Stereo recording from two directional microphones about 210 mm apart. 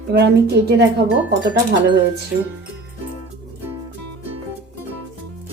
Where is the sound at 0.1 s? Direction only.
50° right (ahead or behind).